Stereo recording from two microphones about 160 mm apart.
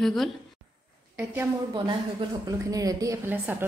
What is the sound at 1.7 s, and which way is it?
A woman's voice, 30° right (ahead or behind).